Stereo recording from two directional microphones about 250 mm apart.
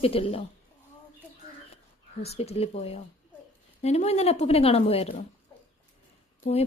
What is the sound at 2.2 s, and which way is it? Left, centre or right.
A woman's voice, left.